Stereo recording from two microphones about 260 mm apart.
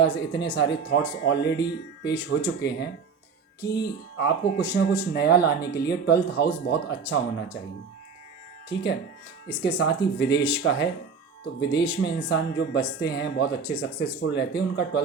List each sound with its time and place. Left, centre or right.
0.0 s speech: left
4.2 s speech: left
8.7 s speech: left